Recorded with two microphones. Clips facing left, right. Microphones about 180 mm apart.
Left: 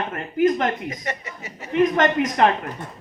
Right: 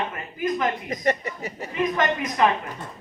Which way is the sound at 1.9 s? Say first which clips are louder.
Left 4 dB; 65° left (ahead or behind).